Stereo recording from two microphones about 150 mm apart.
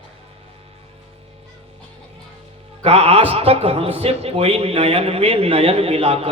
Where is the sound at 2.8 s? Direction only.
40° right (ahead or behind).